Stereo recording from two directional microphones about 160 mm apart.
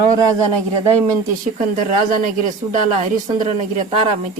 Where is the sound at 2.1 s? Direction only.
55° right (ahead or behind).